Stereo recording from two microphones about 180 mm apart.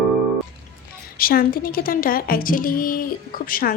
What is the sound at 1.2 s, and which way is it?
A woman's voice, 55° left (ahead or behind).